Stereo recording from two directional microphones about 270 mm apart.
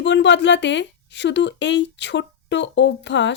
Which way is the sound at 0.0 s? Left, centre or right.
Left.